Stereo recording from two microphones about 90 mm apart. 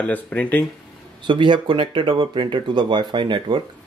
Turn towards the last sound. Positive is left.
turn(degrees=-60)  # may be behind; listen again after turning